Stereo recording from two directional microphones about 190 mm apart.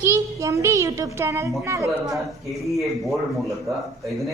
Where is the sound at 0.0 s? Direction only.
15° right (ahead or behind).